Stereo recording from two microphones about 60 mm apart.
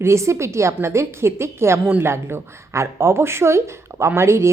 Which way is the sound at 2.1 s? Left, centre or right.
Right.